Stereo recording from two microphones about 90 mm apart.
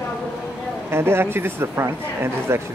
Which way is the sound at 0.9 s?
25° right (ahead or behind).